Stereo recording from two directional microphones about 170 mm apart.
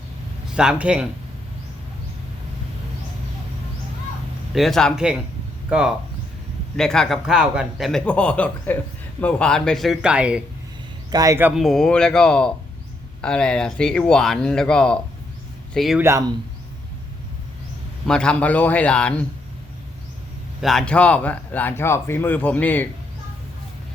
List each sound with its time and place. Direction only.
0.5 s speech: 5° right (ahead or behind)
4.5 s speech: centre (ahead or behind)
6.7 s speech: 5° left (ahead or behind)
11.1 s speech: 20° right (ahead or behind)
11.6 s speech: 5° left (ahead or behind)
16.0 s speech: 15° right (ahead or behind)
18.0 s speech: 5° left (ahead or behind)
20.6 s speech: centre (ahead or behind)